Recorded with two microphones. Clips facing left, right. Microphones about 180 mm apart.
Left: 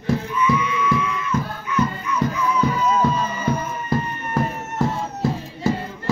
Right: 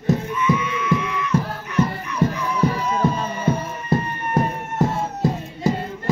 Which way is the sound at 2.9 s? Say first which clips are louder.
Left 1 dB; 30° right (ahead or behind).